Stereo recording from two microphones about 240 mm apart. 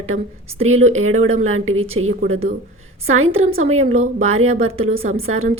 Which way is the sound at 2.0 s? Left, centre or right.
Right.